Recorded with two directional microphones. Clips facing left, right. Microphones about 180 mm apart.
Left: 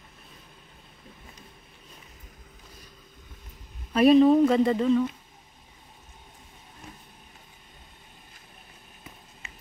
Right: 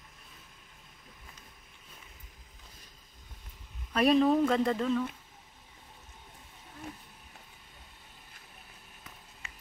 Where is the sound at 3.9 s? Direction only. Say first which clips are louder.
Left 7 dB; centre (ahead or behind).